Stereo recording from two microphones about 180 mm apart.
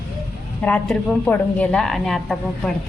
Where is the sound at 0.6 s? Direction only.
10° left (ahead or behind).